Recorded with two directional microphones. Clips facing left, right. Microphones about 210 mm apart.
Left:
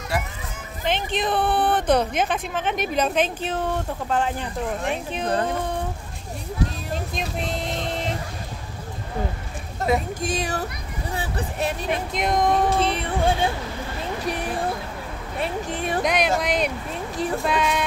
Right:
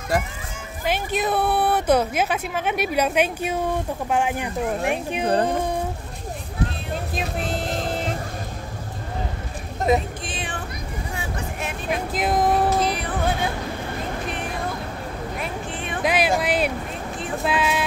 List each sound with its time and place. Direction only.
0.8 s speech: 5° right (ahead or behind)
7.2 s music: centre (ahead or behind)
10.2 s speech: 40° left (ahead or behind)
11.1 s music: 35° left (ahead or behind)
11.9 s speech: 5° right (ahead or behind)
12.6 s music: 30° left (ahead or behind)
15.3 s speech: 35° left (ahead or behind)
16.0 s speech: 5° right (ahead or behind)